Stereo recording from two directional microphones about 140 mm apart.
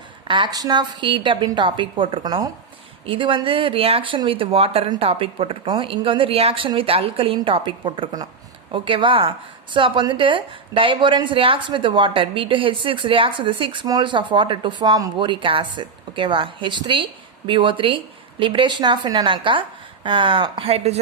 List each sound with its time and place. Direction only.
0.3 s a woman's voice: 35° right (ahead or behind)